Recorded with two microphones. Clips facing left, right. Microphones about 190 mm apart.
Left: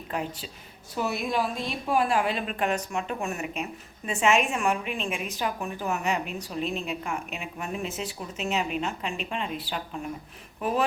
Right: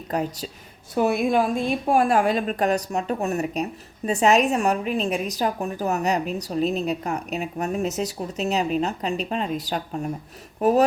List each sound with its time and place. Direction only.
0.1 s a woman's voice: 40° right (ahead or behind)
0.9 s a woman's voice: 50° right (ahead or behind)